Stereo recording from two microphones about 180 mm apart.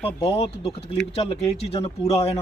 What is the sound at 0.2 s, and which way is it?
Speech, 35° left (ahead or behind).